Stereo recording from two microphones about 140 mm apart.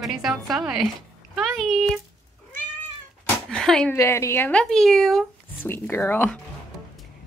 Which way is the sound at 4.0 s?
20° left (ahead or behind).